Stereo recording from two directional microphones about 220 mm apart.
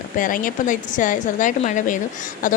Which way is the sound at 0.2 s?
40° left (ahead or behind).